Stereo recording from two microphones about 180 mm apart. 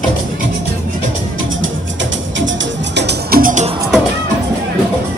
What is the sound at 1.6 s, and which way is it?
Music, 90° right.